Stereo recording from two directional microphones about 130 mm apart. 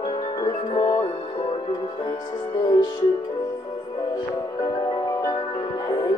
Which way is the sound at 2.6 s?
30° left (ahead or behind).